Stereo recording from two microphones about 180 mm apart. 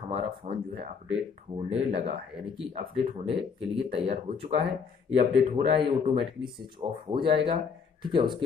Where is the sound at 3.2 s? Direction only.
30° right (ahead or behind).